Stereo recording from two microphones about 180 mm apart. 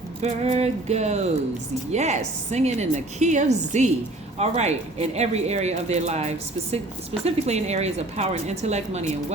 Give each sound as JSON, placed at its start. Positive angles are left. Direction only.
{"t": 0.2, "sound": "speech", "side_deg": -35}